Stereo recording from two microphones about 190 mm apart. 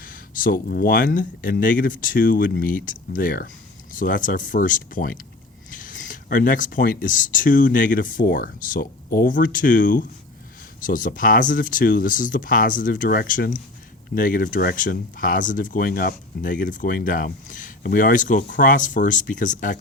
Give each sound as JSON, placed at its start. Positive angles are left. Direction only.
{"t": 0.0, "sound": "speech", "side_deg": 45}